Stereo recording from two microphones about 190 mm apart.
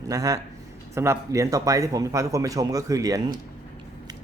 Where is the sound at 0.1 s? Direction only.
20° right (ahead or behind).